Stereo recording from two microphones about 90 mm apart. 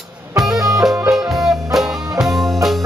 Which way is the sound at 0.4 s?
5° right (ahead or behind).